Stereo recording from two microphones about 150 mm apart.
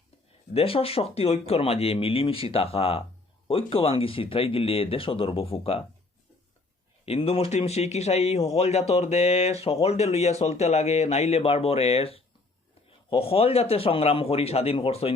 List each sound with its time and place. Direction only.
0.5 s speech: 40° left (ahead or behind)
7.0 s speech: 40° left (ahead or behind)